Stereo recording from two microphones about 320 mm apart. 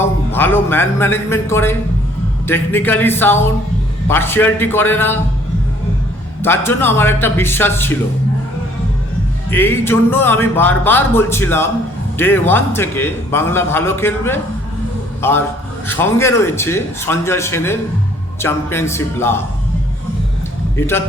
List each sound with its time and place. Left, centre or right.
0.0 s a man's voice: centre
6.4 s a man's voice: centre
9.5 s a man's voice: centre
20.7 s a man's voice: centre